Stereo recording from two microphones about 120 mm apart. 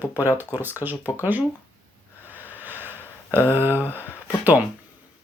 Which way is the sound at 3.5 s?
15° right (ahead or behind).